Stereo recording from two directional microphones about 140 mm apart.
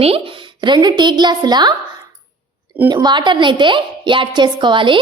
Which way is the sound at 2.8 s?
30° right (ahead or behind).